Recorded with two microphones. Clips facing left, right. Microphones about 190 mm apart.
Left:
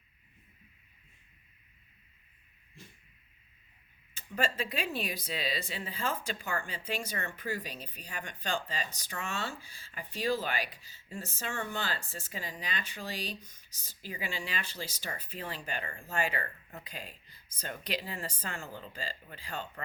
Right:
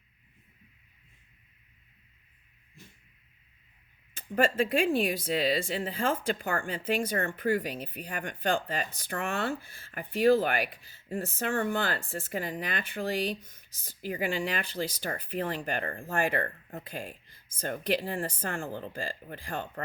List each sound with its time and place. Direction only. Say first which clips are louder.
4.1 s speech: right 7 dB; 50° right (ahead or behind)